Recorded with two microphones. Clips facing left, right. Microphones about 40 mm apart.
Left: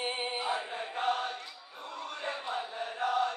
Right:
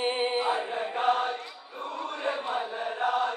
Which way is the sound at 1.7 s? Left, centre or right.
Right.